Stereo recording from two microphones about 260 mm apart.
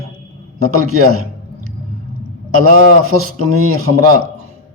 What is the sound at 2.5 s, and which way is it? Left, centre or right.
Speech, right.